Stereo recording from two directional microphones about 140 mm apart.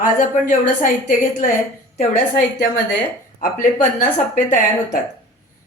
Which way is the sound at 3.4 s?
90° left.